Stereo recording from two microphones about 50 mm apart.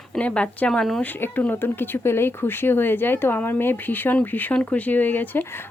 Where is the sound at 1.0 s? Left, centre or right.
Left.